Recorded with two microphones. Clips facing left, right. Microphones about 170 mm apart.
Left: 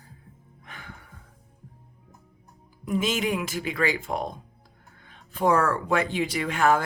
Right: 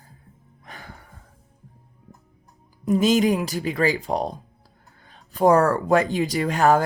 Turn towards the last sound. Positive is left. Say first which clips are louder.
# right 4 dB
turn(degrees=-40)  # may be behind; listen again after turning